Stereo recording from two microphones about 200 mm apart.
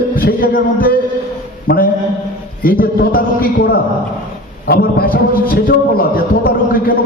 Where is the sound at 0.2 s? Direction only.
45° left (ahead or behind).